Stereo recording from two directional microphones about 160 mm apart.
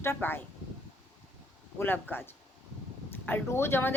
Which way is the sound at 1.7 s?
10° left (ahead or behind).